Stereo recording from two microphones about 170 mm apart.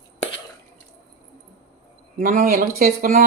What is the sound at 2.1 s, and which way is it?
Speech, 50° right (ahead or behind).